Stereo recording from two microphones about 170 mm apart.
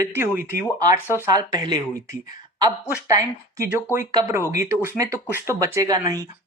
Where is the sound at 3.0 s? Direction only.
20° right (ahead or behind).